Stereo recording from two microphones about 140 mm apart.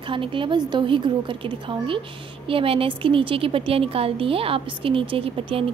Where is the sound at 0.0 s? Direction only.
35° right (ahead or behind).